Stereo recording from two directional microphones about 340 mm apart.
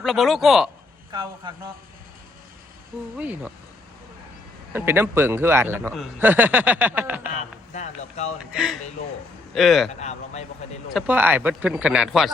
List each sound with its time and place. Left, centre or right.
0.0 s a man's voice: centre
1.1 s speech: centre
3.2 s a man's voice: centre
4.7 s a man's voice: centre
7.7 s speech: centre
8.5 s a man's voice: centre
10.0 s speech: centre
10.9 s a man's voice: centre